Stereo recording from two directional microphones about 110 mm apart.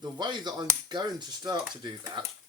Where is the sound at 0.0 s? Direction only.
45° right (ahead or behind).